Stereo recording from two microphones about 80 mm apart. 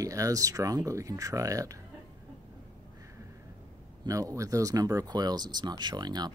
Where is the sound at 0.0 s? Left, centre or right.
Right.